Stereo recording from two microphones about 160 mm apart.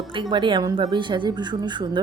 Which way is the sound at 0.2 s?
30° right (ahead or behind).